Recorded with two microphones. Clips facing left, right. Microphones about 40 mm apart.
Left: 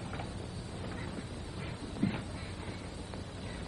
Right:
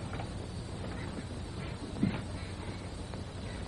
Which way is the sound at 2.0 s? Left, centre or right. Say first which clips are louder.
Right 1 dB; left.